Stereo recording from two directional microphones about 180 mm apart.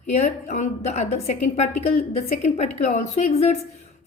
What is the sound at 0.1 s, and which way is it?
A woman's voice, 40° left (ahead or behind).